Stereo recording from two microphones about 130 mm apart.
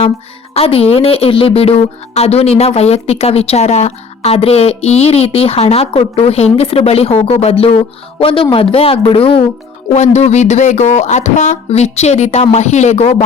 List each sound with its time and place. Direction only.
0.5 s speech: 50° left (ahead or behind)
10.2 s speech: 60° left (ahead or behind)